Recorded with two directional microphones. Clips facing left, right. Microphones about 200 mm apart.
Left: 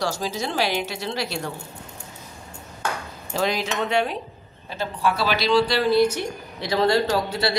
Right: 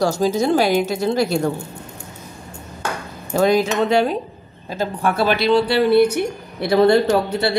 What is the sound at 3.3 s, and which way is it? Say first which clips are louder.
Speech: right 9 dB; 50° right (ahead or behind).